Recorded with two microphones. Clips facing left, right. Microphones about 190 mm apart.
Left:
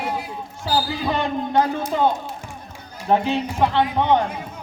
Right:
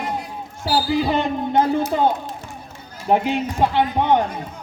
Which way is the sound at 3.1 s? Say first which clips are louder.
Right 1 dB; 15° right (ahead or behind).